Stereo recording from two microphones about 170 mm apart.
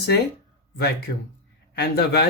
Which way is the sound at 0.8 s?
70° left (ahead or behind).